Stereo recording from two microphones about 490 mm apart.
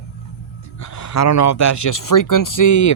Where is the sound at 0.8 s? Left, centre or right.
Left.